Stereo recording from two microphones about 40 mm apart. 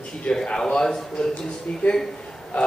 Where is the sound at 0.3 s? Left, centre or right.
Left.